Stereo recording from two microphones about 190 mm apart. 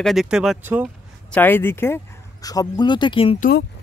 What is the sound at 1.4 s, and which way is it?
Speech, 10° left (ahead or behind).